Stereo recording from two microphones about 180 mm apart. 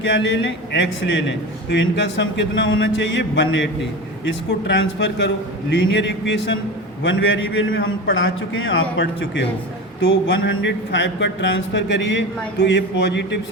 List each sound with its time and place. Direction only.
0.0 s a man's voice: 90° left